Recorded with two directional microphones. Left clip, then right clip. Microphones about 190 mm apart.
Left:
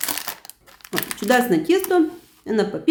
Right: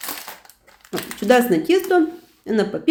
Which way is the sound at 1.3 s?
Centre (ahead or behind).